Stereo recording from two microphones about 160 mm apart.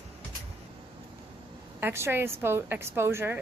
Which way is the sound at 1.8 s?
15° right (ahead or behind).